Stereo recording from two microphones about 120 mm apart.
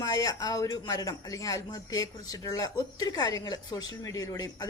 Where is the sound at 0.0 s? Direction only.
30° left (ahead or behind).